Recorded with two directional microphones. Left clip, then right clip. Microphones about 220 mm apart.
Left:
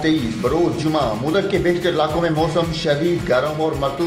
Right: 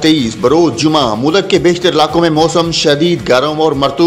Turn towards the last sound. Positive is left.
turn(degrees=-45)  # may be behind; listen again after turning